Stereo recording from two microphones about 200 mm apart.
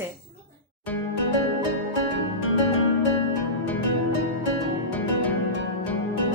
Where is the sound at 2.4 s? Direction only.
90° left.